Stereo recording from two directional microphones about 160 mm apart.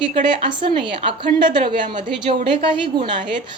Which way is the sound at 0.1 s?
35° right (ahead or behind).